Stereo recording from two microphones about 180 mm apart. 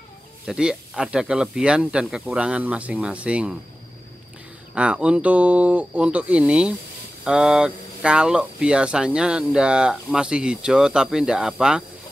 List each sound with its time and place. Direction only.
0.5 s speech: 5° right (ahead or behind)
4.7 s speech: 5° right (ahead or behind)